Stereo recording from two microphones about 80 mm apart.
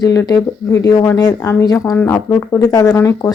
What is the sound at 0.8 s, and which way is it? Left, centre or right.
Speech, left.